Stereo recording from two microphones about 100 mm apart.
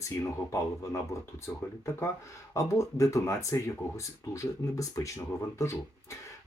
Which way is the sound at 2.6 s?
30° left (ahead or behind).